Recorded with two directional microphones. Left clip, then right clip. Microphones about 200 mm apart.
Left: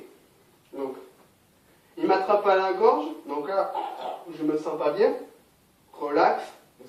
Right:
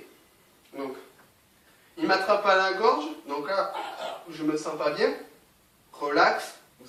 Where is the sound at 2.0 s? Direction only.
40° right (ahead or behind).